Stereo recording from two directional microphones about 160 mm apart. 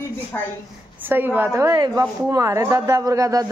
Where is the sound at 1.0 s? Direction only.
10° right (ahead or behind).